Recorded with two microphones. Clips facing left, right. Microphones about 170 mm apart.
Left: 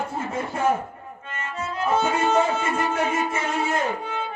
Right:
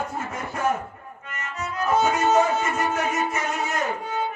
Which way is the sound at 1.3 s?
25° left (ahead or behind).